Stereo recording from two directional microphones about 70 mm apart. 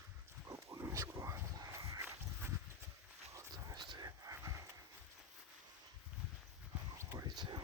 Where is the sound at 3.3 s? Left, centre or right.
Right.